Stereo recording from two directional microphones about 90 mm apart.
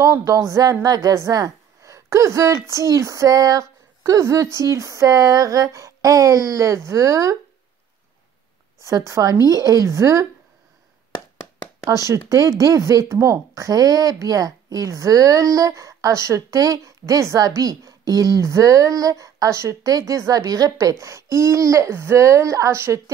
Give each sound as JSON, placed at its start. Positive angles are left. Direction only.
{"t": 0.0, "sound": "a woman's voice", "side_deg": -40}
{"t": 8.8, "sound": "a woman's voice", "side_deg": -35}
{"t": 12.1, "sound": "a woman's voice", "side_deg": -40}